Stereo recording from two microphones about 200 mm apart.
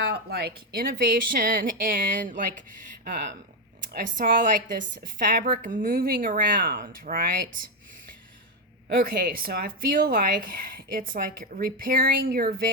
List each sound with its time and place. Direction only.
0.0 s speech: 55° right (ahead or behind)
3.9 s speech: 45° right (ahead or behind)
8.9 s speech: 50° right (ahead or behind)